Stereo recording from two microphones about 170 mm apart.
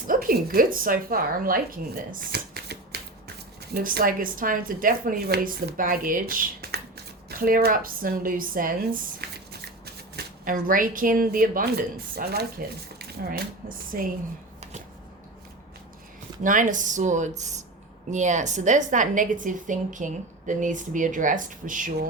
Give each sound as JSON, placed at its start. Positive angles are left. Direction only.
{"t": 0.1, "sound": "speech", "side_deg": -55}
{"t": 3.8, "sound": "speech", "side_deg": -60}
{"t": 16.4, "sound": "a woman's voice", "side_deg": -50}